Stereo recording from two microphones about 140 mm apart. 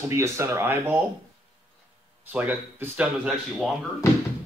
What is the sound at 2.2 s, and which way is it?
Speech, 10° right (ahead or behind).